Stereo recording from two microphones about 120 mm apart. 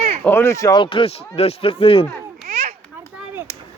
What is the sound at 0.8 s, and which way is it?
Speech, 50° left (ahead or behind).